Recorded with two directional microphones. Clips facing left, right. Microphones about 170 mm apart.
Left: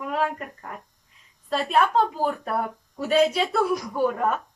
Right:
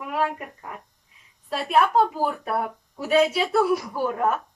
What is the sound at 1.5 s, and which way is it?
Speech, 5° right (ahead or behind).